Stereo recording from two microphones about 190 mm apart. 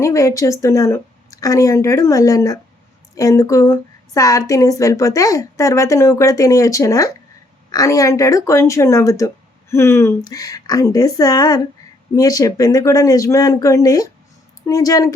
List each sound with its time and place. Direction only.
0.0 s a woman's voice: 15° left (ahead or behind)